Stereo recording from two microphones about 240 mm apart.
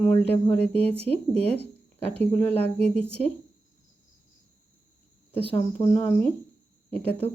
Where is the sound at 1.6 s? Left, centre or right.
Right.